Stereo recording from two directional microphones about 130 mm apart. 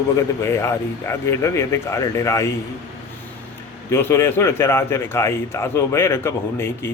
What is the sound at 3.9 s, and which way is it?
A man's voice, 20° left (ahead or behind).